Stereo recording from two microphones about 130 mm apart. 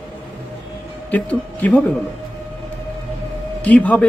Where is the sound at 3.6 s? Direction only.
10° left (ahead or behind).